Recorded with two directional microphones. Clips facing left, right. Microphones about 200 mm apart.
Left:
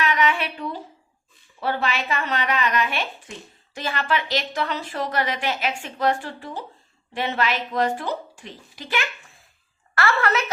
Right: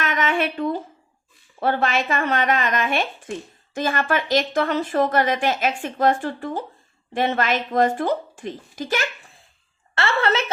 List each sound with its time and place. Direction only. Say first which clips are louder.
0.0 s a sound: right 1 dB; 45° right (ahead or behind)
1.5 s speech: right 4 dB; 50° right (ahead or behind)
9.9 s a woman's voice: right 1 dB; 25° right (ahead or behind)